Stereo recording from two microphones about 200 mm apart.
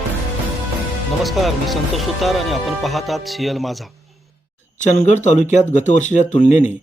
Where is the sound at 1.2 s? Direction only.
Centre (ahead or behind).